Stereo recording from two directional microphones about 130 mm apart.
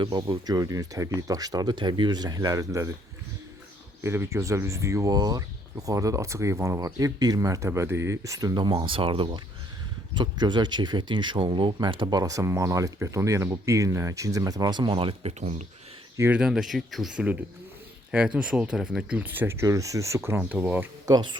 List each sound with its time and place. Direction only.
0.0 s speech: 30° right (ahead or behind)
4.0 s speech: 20° right (ahead or behind); by 15.6 s 60° right (ahead or behind)
16.3 s speech: 5° right (ahead or behind)
18.3 s speech: 10° right (ahead or behind)
20.4 s speech: 10° right (ahead or behind)
21.1 s speech: 35° right (ahead or behind)